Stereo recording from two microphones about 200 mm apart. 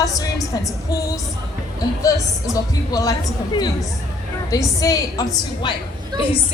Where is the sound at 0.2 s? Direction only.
15° left (ahead or behind).